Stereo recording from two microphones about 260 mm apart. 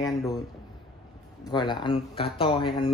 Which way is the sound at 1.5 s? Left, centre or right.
Centre.